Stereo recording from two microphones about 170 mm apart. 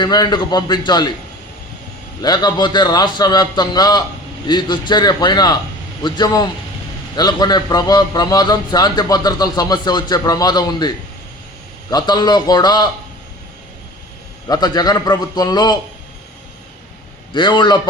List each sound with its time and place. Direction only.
0.0 s a man's voice: 25° left (ahead or behind)
2.2 s a man's voice: 25° left (ahead or behind)
14.4 s a man's voice: 25° left (ahead or behind)
17.3 s a man's voice: 25° left (ahead or behind)